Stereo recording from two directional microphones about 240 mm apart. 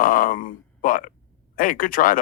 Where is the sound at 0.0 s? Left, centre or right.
Left.